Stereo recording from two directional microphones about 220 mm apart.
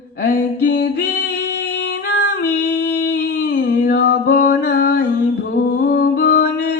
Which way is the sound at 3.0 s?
50° left (ahead or behind).